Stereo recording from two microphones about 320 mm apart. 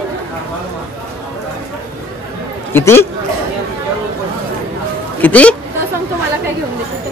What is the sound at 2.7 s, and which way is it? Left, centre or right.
Speech, centre.